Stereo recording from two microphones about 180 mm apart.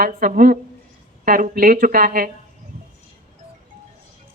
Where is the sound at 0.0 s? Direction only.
50° right (ahead or behind).